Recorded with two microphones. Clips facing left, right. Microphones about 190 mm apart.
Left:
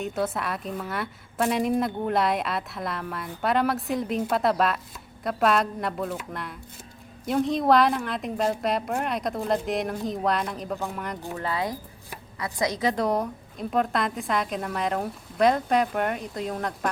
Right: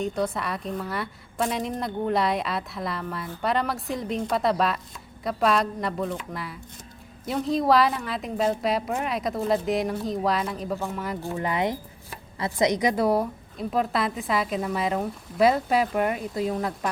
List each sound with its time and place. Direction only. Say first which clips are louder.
0.0 s a woman's voice: right 1 dB; 5° left (ahead or behind)
11.3 s a woman's voice: right 3 dB; 20° right (ahead or behind)